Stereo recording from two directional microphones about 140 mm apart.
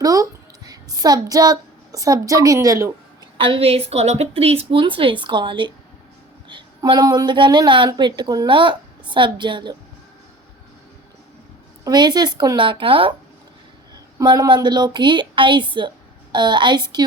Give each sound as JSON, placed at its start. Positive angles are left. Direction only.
{"t": 0.0, "sound": "a sound", "side_deg": -25}
{"t": 3.3, "sound": "a woman's voice", "side_deg": -40}
{"t": 11.9, "sound": "a woman's voice", "side_deg": -30}
{"t": 14.2, "sound": "a woman's voice", "side_deg": -30}